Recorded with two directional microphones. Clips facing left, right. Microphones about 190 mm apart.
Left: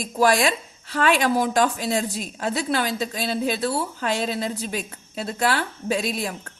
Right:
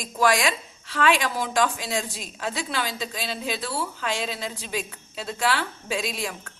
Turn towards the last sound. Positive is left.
turn(degrees=40)  # may be behind; listen again after turning